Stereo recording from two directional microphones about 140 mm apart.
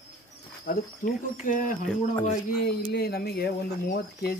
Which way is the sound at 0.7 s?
75° left (ahead or behind).